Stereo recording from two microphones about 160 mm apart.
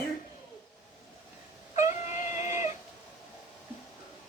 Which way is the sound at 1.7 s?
50° left (ahead or behind).